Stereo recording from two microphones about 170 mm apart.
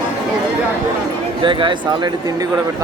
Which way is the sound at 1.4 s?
30° right (ahead or behind).